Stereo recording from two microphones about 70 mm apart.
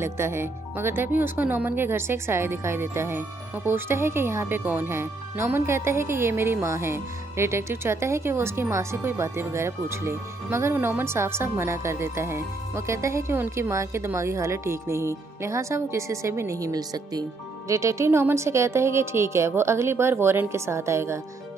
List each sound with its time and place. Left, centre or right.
0.0 s speech: right
17.6 s speech: right